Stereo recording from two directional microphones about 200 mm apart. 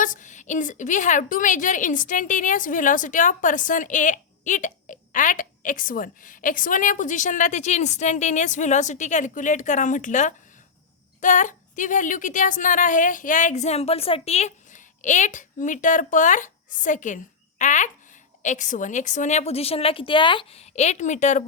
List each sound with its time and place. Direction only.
0.0 s a woman's voice: 40° left (ahead or behind)